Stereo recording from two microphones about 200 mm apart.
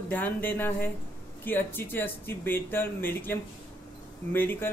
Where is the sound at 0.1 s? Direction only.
10° left (ahead or behind).